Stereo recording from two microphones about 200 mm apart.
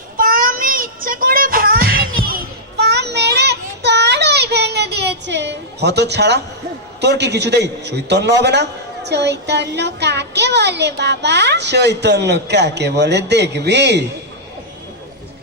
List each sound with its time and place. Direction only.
0.2 s child singing: 45° right (ahead or behind)
7.0 s a man's voice: 60° right (ahead or behind)